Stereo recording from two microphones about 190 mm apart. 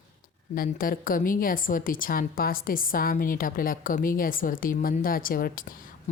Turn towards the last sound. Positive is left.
turn(degrees=45)  # may be behind; listen again after turning